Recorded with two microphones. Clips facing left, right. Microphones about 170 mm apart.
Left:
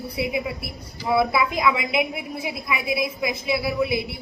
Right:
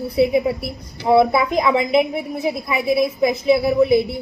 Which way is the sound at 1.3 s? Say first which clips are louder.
Right 4 dB; 40° right (ahead or behind).